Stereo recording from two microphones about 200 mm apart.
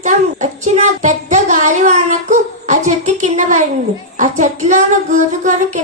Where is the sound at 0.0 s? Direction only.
35° right (ahead or behind).